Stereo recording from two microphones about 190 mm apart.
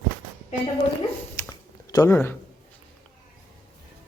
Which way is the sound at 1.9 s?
15° left (ahead or behind).